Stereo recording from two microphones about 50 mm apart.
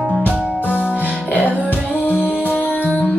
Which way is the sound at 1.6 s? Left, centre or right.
Left.